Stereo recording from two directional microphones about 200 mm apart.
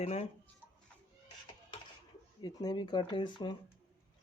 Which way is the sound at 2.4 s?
20° left (ahead or behind).